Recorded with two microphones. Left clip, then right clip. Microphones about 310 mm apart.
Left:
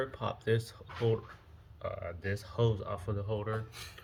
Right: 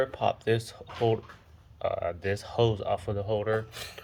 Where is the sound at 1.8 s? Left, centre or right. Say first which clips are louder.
Right 9 dB; centre.